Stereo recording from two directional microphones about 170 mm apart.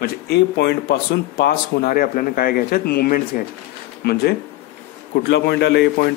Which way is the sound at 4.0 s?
70° left (ahead or behind).